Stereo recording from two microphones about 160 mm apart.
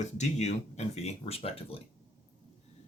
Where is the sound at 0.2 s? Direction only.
45° left (ahead or behind).